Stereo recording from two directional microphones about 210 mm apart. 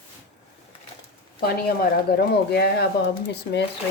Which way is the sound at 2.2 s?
50° left (ahead or behind).